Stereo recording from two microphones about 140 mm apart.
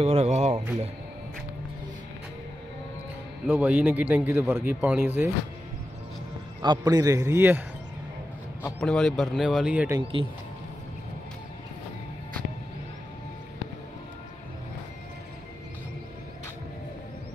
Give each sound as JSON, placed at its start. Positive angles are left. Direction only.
{"t": 0.0, "sound": "speech", "side_deg": -45}
{"t": 3.4, "sound": "a man's voice", "side_deg": -10}
{"t": 6.6, "sound": "a man's voice", "side_deg": -30}
{"t": 8.8, "sound": "speech", "side_deg": 5}
{"t": 10.1, "sound": "speech", "side_deg": -40}